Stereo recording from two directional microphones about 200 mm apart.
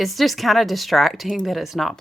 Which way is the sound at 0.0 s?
Centre (ahead or behind).